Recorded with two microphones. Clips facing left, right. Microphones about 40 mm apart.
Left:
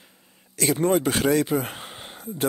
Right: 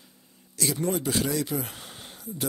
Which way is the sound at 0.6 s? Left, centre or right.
Left.